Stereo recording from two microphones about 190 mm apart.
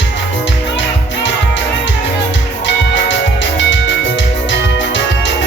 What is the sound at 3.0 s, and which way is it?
Music, 75° left (ahead or behind).